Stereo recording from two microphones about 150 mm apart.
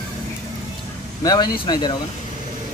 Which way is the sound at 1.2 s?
25° left (ahead or behind).